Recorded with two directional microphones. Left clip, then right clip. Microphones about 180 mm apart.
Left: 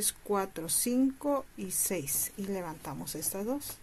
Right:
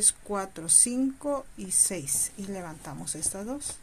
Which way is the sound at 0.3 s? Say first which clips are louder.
Left 3 dB; 10° left (ahead or behind).